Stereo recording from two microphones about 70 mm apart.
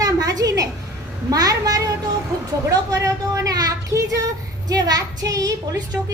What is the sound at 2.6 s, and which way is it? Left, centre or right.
A woman's voice, right.